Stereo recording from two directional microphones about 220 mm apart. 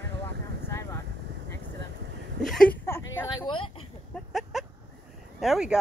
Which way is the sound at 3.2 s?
20° left (ahead or behind).